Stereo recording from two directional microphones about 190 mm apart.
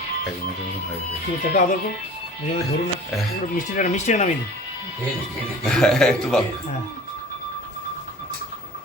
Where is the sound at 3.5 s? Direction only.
40° left (ahead or behind).